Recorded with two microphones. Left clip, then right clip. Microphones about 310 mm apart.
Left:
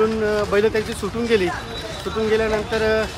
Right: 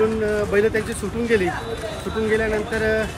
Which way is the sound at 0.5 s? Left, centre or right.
Centre.